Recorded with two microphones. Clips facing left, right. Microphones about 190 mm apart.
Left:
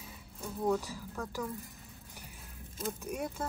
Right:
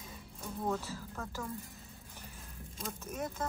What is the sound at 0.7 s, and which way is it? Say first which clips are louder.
Speech: left 5 dB; 15° left (ahead or behind).